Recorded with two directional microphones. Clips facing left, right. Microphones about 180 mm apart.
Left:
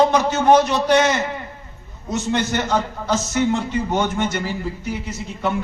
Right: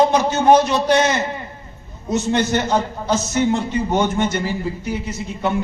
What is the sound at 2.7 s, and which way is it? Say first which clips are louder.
A man's voice: right 2 dB; 15° right (ahead or behind).